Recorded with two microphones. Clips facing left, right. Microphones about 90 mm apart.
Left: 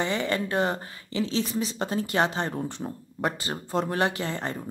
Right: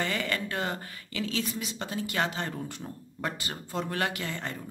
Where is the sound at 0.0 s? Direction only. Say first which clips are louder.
Left 4 dB; 25° left (ahead or behind).